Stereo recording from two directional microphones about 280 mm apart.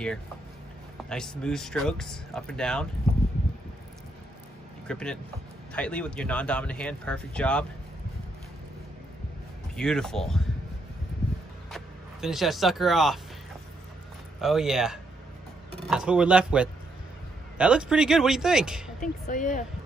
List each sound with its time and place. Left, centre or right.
1.0 s speech: centre
4.8 s speech: centre
9.8 s speech: centre
11.7 s speech: centre
14.4 s speech: centre
18.9 s speech: left